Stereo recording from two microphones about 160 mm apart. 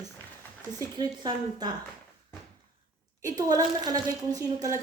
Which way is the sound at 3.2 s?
20° right (ahead or behind).